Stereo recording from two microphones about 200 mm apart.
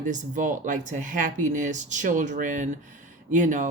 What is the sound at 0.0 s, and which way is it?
Speech, 40° right (ahead or behind).